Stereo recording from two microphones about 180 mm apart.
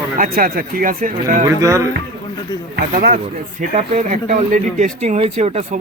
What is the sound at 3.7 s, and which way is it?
Speech, 40° right (ahead or behind).